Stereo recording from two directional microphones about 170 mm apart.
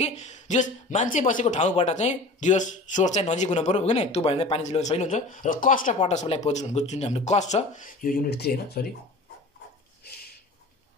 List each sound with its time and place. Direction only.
0.0 s speech: 40° left (ahead or behind)
5.9 s speech: 35° left (ahead or behind); by 8.9 s 65° left (ahead or behind)